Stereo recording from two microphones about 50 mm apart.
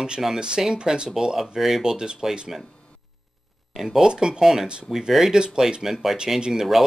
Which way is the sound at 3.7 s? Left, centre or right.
Centre.